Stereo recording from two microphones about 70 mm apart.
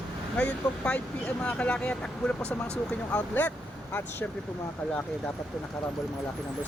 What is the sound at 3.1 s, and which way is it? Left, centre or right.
Speech, left.